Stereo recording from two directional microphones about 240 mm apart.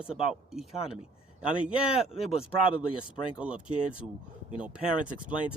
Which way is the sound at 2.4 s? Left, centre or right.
Left.